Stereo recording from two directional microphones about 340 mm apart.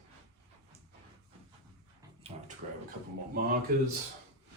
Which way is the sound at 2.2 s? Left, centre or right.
Centre.